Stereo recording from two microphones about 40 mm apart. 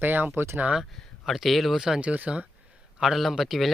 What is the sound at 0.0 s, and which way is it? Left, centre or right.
Speech, right.